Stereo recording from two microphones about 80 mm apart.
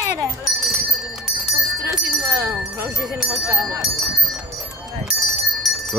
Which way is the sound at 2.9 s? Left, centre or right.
Centre.